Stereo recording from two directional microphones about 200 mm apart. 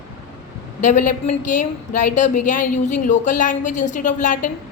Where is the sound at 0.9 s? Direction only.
40° left (ahead or behind).